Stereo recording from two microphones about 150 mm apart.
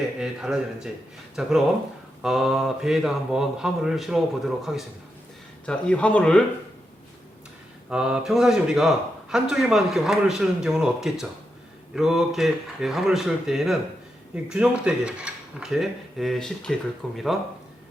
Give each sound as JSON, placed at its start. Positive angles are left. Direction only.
{"t": 0.2, "sound": "speech", "side_deg": -5}
{"t": 7.9, "sound": "speech", "side_deg": -5}